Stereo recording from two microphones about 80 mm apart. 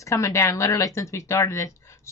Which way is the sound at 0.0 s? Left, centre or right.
Left.